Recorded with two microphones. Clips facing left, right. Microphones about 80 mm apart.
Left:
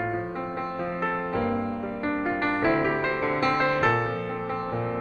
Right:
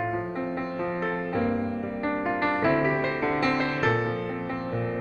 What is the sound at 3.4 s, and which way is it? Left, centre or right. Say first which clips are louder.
Music: left 5 dB; left.